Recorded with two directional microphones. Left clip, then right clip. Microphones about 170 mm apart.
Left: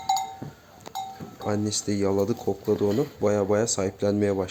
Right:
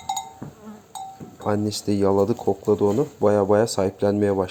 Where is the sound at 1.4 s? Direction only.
10° right (ahead or behind).